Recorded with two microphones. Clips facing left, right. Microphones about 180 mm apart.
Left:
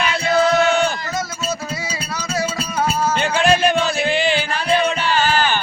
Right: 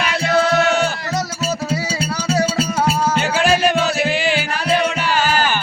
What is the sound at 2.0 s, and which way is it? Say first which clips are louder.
Music: right 6 dB; 80° right.